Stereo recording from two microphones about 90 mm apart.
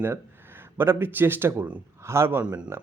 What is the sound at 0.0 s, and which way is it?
A man's voice, 25° right (ahead or behind).